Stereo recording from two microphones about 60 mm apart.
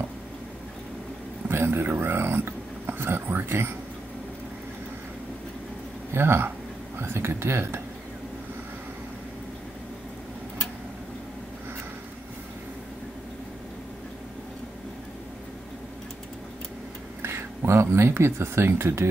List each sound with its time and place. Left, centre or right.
1.5 s speech: right
6.1 s speech: right
17.2 s a sound: right
17.6 s speech: right